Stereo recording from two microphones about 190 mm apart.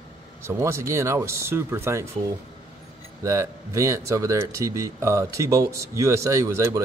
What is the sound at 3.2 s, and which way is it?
Speech, 15° right (ahead or behind).